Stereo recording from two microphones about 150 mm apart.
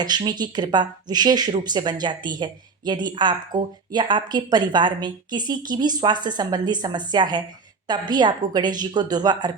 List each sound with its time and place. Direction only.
0.0 s speech: 30° right (ahead or behind)